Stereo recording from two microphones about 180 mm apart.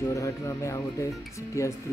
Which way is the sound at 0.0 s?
20° left (ahead or behind).